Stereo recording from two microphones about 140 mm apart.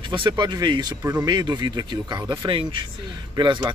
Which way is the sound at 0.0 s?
35° right (ahead or behind).